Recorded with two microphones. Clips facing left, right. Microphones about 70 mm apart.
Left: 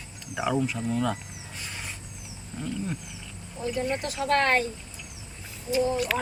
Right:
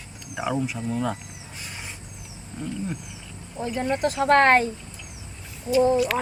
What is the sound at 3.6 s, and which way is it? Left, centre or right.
Speech, right.